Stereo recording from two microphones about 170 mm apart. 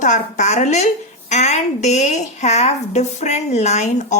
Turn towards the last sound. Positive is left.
turn(degrees=45)  # may be behind; listen again after turning